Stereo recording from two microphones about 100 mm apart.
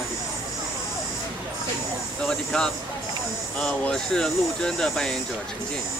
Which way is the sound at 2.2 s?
5° left (ahead or behind).